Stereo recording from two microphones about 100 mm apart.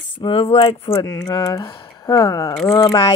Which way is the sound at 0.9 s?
30° left (ahead or behind).